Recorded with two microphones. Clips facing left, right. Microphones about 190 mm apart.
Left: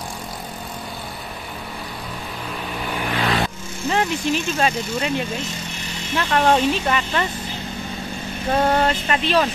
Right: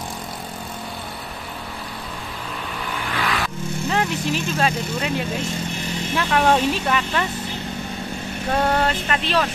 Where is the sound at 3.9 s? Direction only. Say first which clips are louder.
Left 3 dB; centre (ahead or behind).